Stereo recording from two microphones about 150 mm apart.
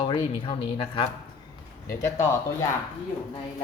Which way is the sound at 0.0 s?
35° left (ahead or behind).